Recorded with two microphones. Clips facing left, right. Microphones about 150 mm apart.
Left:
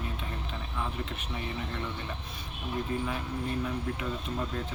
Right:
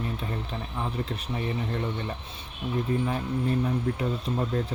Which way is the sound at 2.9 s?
35° right (ahead or behind).